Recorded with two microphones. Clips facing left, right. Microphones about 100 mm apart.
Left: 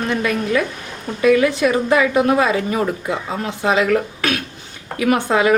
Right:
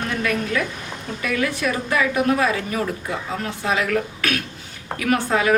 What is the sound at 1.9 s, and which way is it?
Speech, 25° left (ahead or behind).